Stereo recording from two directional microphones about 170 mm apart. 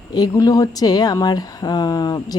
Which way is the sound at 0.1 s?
20° left (ahead or behind).